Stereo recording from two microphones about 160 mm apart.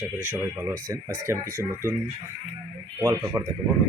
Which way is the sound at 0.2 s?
15° right (ahead or behind).